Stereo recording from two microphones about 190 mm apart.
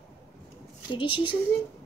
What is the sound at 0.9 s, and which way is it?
Speech, 25° left (ahead or behind).